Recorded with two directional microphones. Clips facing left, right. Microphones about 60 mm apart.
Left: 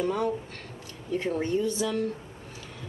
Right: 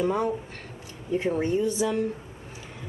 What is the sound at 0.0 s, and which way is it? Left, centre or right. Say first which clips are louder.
Speech: right 2 dB; centre.